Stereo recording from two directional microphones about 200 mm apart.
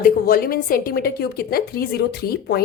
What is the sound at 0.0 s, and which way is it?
A woman's voice, 45° left (ahead or behind).